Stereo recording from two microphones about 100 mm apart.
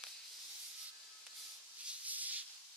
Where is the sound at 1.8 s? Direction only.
15° right (ahead or behind).